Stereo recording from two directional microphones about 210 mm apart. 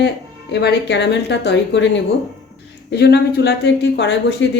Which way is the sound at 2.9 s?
50° left (ahead or behind).